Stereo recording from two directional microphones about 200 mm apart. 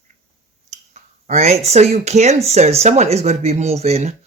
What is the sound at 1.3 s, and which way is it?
Speech, 35° right (ahead or behind).